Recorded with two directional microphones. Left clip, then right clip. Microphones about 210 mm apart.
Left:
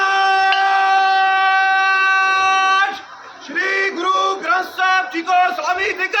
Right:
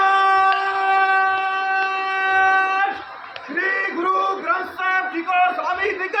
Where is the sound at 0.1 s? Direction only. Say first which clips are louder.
Left 1 dB; 10° left (ahead or behind).